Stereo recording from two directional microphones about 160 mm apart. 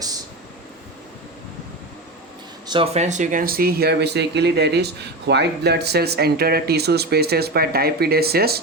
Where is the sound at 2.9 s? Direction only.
50° right (ahead or behind).